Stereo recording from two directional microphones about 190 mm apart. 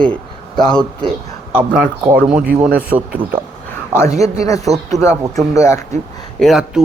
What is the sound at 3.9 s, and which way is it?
A woman's voice, 15° left (ahead or behind).